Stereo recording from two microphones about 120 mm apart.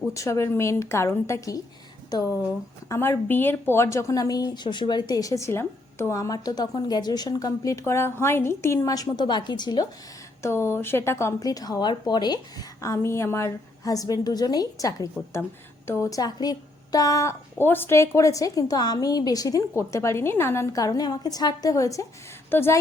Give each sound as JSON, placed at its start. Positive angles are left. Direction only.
{"t": 0.1, "sound": "a woman's voice", "side_deg": 25}
{"t": 2.9, "sound": "a woman's voice", "side_deg": 20}
{"t": 10.4, "sound": "a woman's voice", "side_deg": 20}